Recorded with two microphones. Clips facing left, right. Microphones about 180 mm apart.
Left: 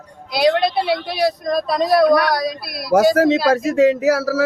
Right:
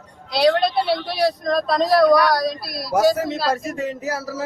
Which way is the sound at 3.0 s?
80° left.